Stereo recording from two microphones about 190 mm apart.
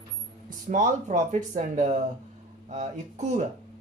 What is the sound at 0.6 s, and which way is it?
Speech, 40° right (ahead or behind).